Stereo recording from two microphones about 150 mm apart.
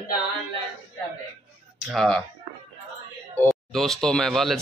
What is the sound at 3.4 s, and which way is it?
Speech, centre (ahead or behind).